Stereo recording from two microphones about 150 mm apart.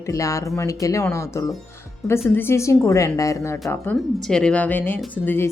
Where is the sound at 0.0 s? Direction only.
20° left (ahead or behind).